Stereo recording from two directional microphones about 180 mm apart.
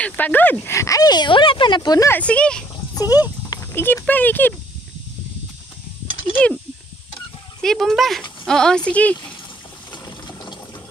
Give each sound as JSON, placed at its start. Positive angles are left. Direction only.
{"t": 0.0, "sound": "speech", "side_deg": 10}
{"t": 2.9, "sound": "speech", "side_deg": 20}
{"t": 6.3, "sound": "speech", "side_deg": 5}
{"t": 7.6, "sound": "speech", "side_deg": 0}
{"t": 10.0, "sound": "ratchet", "side_deg": 25}